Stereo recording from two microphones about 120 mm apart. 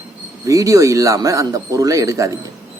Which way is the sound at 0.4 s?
25° right (ahead or behind).